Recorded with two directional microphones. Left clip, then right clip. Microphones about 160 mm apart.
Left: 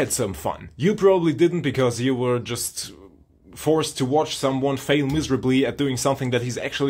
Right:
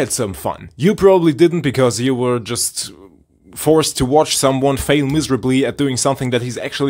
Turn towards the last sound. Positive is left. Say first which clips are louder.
# right 4 dB
turn(degrees=-25)  # may be behind; listen again after turning